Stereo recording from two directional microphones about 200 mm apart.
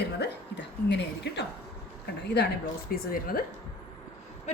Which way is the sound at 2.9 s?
45° left (ahead or behind).